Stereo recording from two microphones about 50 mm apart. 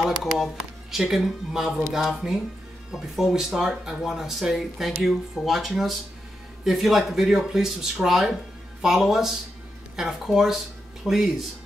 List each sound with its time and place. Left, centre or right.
0.0 s speech: centre